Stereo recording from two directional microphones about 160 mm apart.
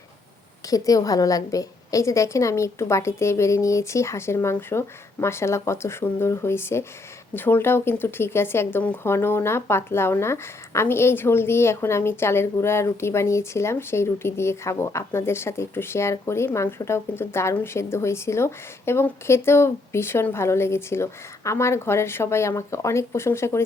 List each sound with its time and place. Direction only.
0.7 s speech: 20° left (ahead or behind)